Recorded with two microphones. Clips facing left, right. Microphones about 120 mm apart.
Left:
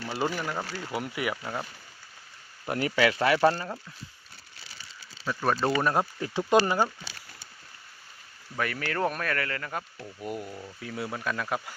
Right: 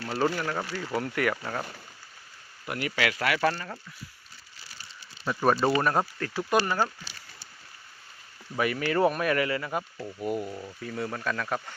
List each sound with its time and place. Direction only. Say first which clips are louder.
0.5 s speech: right 2 dB; 5° left (ahead or behind)
2.6 s speech: left 4 dB; 35° left (ahead or behind)
5.2 s speech: right 3 dB; 10° right (ahead or behind)
6.1 s speech: left 3 dB; 15° left (ahead or behind)
8.5 s speech: right 4 dB; 5° right (ahead or behind)